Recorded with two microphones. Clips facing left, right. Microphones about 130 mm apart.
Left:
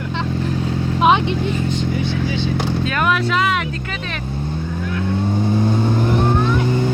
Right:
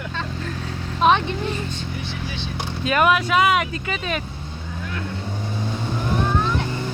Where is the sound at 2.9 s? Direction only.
10° right (ahead or behind).